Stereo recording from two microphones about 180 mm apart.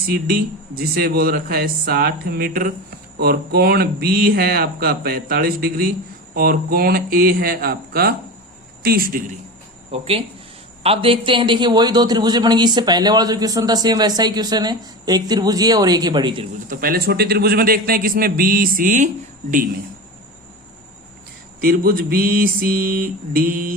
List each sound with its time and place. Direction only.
0.1 s a man's voice: 55° right (ahead or behind)
9.9 s a man's voice: 35° right (ahead or behind)
16.6 s a man's voice: 55° right (ahead or behind)
21.6 s speech: 55° right (ahead or behind)